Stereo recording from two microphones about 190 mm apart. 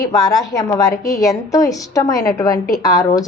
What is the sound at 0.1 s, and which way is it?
A woman's voice, 20° left (ahead or behind).